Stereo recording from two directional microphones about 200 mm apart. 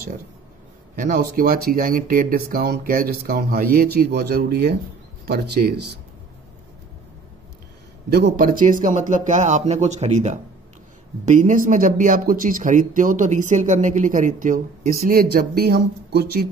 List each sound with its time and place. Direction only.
0.9 s speech: 45° right (ahead or behind)
8.1 s speech: 55° right (ahead or behind)